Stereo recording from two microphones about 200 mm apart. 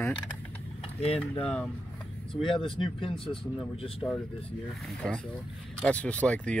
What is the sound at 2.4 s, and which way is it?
Speech, 25° left (ahead or behind).